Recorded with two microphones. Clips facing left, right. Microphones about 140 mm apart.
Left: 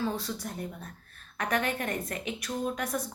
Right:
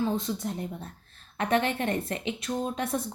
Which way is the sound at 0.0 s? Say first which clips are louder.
Right 4 dB; 20° right (ahead or behind).